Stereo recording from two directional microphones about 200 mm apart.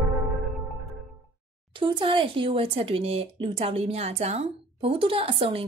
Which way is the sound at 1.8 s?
25° right (ahead or behind).